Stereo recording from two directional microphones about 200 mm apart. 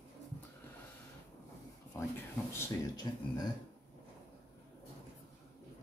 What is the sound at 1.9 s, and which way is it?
Speech, 10° left (ahead or behind).